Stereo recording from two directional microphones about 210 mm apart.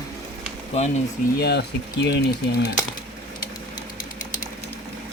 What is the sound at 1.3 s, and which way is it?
Speech, 50° left (ahead or behind).